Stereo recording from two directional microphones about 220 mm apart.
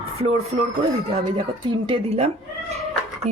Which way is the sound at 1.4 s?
25° right (ahead or behind).